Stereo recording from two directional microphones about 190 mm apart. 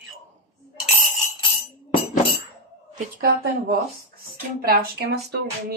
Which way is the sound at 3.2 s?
55° right (ahead or behind).